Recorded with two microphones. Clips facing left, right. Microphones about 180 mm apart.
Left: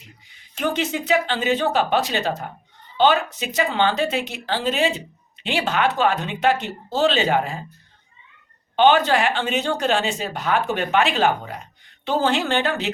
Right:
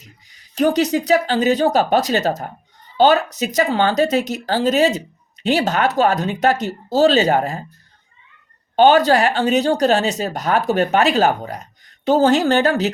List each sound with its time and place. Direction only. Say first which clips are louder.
0.0 s speech: right 1 dB; 40° right (ahead or behind)
8.7 s speech: right 4 dB; 40° right (ahead or behind)